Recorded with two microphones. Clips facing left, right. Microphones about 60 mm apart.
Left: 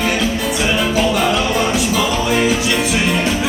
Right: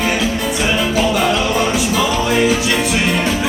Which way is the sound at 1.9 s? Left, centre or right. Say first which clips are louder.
Right 1 dB; centre.